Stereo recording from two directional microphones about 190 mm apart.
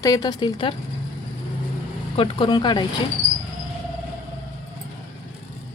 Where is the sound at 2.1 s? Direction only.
25° left (ahead or behind).